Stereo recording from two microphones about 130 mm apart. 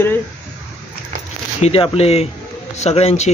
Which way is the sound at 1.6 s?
50° left (ahead or behind).